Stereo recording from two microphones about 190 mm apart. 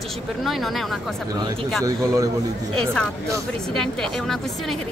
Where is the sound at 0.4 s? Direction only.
Centre (ahead or behind).